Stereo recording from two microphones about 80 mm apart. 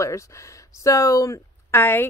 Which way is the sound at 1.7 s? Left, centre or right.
Left.